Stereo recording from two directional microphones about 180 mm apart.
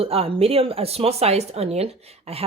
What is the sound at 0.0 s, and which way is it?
Speech, 30° right (ahead or behind).